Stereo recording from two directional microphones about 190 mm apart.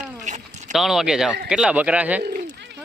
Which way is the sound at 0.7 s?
Centre (ahead or behind).